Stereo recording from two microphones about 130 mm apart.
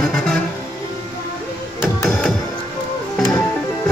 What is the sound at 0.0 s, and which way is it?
Music, 5° left (ahead or behind).